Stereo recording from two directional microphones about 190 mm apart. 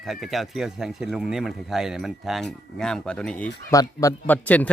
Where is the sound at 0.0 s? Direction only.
Centre (ahead or behind).